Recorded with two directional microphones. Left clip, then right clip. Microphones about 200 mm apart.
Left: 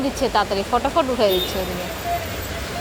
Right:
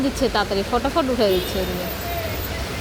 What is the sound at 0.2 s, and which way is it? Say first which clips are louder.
Speech: left 2 dB; 20° right (ahead or behind).